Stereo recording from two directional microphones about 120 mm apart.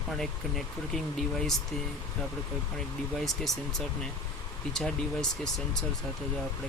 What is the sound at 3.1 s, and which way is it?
Speech, centre (ahead or behind).